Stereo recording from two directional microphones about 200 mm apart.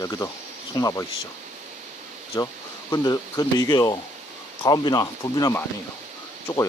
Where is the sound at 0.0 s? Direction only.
15° left (ahead or behind).